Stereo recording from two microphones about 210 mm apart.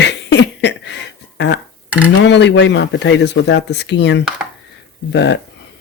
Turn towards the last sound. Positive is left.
turn(degrees=55)  # may be behind; listen again after turning